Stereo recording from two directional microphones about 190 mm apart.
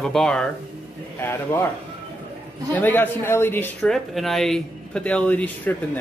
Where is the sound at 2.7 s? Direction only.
10° left (ahead or behind).